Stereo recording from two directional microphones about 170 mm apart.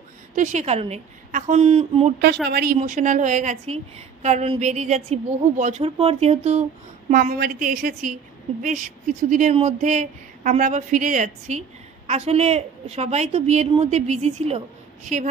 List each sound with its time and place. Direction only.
0.4 s a woman's voice: 45° right (ahead or behind)
2.4 s a woman's voice: 65° right (ahead or behind)
2.8 s a woman's voice: 50° right (ahead or behind)
7.1 s a woman's voice: 55° right (ahead or behind); by 14.6 s 40° right (ahead or behind)